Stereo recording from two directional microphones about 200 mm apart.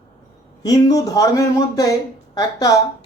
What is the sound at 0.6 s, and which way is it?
A man's voice, 20° left (ahead or behind).